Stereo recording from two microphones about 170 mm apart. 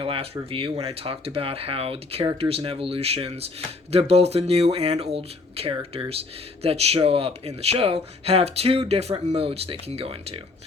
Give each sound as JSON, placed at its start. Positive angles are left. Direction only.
{"t": 0.0, "sound": "speech", "side_deg": -35}